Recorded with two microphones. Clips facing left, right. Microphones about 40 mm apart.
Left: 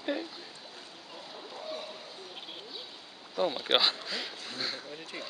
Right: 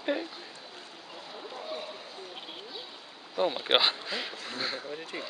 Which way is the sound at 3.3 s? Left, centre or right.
Centre.